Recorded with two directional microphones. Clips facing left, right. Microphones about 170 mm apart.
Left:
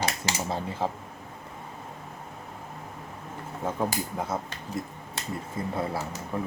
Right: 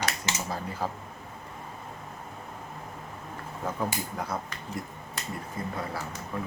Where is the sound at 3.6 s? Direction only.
20° left (ahead or behind).